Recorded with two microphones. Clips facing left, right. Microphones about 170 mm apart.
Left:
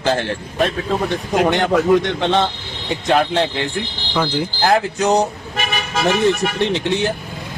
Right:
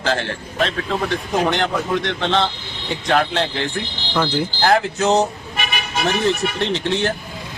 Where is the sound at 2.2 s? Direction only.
15° left (ahead or behind).